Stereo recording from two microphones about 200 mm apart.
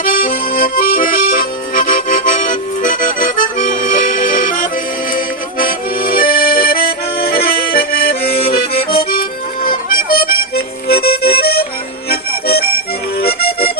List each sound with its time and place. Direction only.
0.0 s accordion: 45° left (ahead or behind)
9.6 s music: 45° left (ahead or behind)